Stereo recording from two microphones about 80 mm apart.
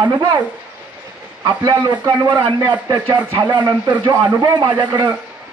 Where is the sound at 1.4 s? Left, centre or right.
Right.